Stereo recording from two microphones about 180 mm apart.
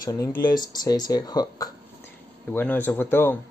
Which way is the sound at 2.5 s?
10° left (ahead or behind).